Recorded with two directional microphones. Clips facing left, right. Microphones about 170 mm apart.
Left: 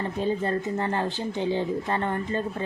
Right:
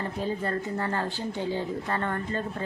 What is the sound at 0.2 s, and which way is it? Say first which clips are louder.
A woman's voice: left 4 dB; 20° left (ahead or behind).